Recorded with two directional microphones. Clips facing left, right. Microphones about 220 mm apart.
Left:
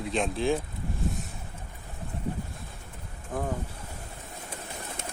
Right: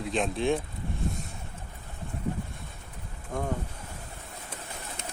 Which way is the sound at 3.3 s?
5° left (ahead or behind).